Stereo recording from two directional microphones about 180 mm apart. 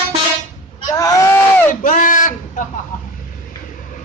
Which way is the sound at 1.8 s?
45° left (ahead or behind).